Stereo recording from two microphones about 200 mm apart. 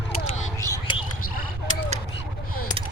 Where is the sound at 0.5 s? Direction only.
15° left (ahead or behind).